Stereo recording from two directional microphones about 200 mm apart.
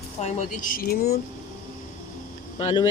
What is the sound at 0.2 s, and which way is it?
Speech, 35° left (ahead or behind).